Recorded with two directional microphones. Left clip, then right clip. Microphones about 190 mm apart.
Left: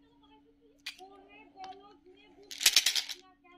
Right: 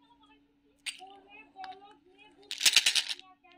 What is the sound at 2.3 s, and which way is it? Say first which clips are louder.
Rattle: right 2 dB; 10° right (ahead or behind).